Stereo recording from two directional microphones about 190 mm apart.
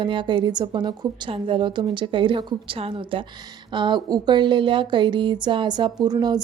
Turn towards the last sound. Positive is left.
turn(degrees=-20)  # may be behind; listen again after turning